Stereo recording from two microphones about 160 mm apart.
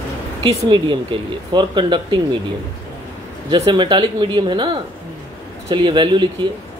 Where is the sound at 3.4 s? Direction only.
30° right (ahead or behind).